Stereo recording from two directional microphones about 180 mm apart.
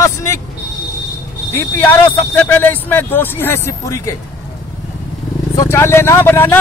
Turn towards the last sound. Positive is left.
turn(degrees=10)  # may be behind; listen again after turning